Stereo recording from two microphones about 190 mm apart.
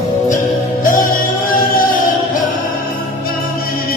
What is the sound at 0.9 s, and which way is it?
Music, 45° left (ahead or behind).